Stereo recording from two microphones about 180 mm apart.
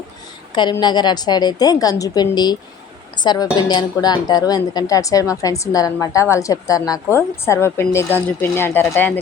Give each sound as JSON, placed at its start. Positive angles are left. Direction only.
{"t": 0.5, "sound": "a woman's voice", "side_deg": 25}